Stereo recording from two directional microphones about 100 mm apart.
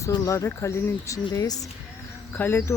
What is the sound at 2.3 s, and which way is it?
Speech, 20° left (ahead or behind).